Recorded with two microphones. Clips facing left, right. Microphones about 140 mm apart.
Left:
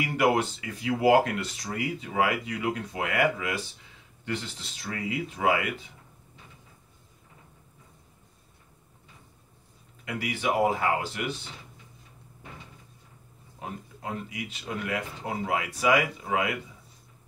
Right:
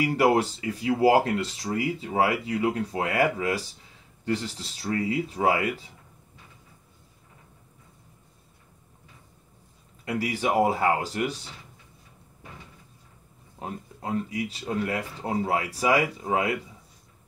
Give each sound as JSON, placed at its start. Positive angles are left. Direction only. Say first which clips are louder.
{"t": 0.0, "sound": "speech", "louder": "right 3 dB", "side_deg": -35}
{"t": 10.0, "sound": "speech", "louder": "right 3 dB", "side_deg": -35}
{"t": 13.6, "sound": "speech", "louder": "right 3 dB", "side_deg": -35}